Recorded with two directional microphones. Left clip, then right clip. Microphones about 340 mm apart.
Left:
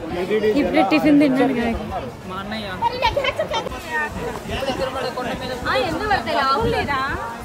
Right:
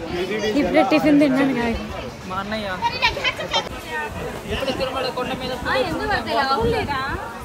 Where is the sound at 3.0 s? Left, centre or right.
Left.